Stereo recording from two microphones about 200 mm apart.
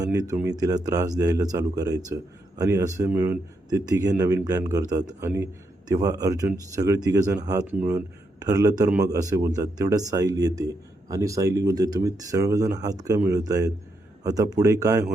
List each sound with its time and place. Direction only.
0.0 s speech: 15° right (ahead or behind)